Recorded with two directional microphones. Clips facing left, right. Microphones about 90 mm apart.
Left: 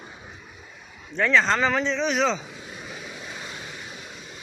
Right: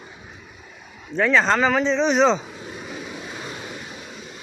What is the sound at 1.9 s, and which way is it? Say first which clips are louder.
Speech: right 6 dB; 25° right (ahead or behind).